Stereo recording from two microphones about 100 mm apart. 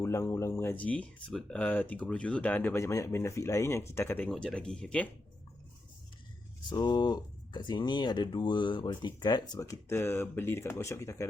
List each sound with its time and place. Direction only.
0.0 s speech: 30° left (ahead or behind)
2.8 s speech: 30° left (ahead or behind)
4.3 s speech: 5° left (ahead or behind)
6.7 s speech: 45° left (ahead or behind); by 11.3 s 30° left (ahead or behind)